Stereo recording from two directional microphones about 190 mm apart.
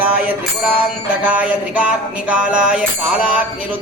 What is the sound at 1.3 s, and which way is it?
Music, 10° right (ahead or behind).